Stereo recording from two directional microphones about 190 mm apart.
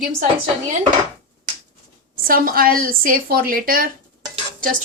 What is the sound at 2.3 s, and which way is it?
A woman's voice, 50° right (ahead or behind).